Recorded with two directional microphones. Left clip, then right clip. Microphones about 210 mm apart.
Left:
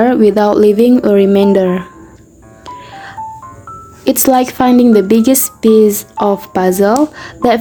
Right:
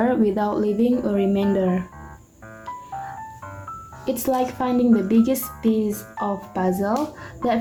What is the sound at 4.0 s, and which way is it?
Speech, 45° left (ahead or behind).